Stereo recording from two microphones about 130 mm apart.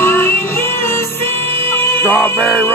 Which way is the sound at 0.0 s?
20° left (ahead or behind).